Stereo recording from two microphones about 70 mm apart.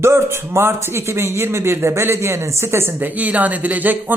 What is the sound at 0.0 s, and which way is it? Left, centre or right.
A man's voice, right.